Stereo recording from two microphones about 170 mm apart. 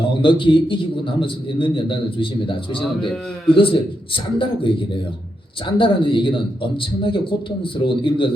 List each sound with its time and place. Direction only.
0.2 s a man's voice: 30° left (ahead or behind)